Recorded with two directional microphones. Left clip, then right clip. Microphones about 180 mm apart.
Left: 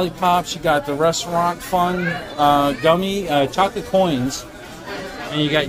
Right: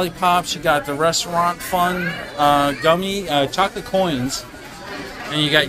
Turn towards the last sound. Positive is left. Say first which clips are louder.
# right 2 dB
turn(degrees=5)  # may be behind; listen again after turning